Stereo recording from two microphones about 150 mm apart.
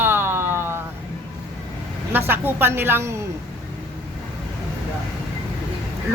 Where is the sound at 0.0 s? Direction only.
15° right (ahead or behind).